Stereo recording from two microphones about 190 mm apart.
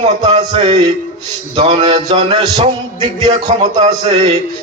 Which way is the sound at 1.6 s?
30° right (ahead or behind).